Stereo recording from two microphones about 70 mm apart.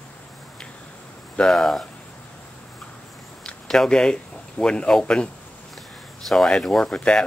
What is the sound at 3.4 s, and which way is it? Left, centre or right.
Speech, centre.